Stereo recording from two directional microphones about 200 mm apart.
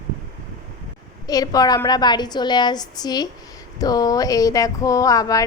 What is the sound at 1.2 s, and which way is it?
A woman's voice, 20° left (ahead or behind).